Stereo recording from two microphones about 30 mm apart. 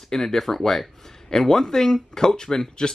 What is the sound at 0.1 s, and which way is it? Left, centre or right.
Speech, centre.